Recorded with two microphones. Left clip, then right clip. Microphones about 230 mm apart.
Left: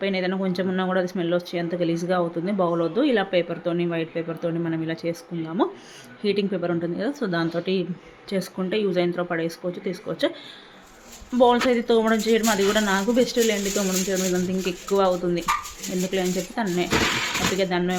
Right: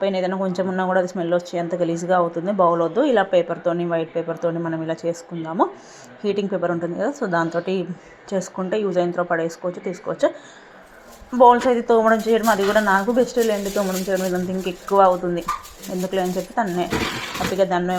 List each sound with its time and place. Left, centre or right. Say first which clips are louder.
0.0 s speech: right 4 dB; centre
7.2 s a woman's voice: right 5 dB; centre
8.3 s speech: right 3 dB; centre
11.3 s speech: right 5 dB; centre